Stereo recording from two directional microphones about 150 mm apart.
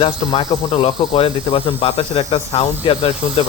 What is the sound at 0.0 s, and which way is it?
Speech, 35° left (ahead or behind).